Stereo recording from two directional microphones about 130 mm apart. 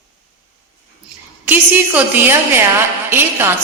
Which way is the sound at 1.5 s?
15° right (ahead or behind).